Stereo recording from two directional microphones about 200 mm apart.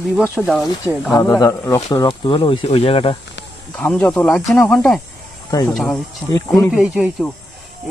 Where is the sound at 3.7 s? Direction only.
5° left (ahead or behind).